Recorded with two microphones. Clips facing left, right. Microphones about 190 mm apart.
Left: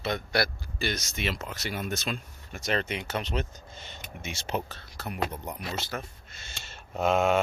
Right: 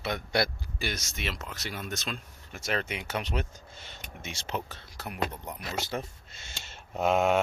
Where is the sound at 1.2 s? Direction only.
Centre (ahead or behind).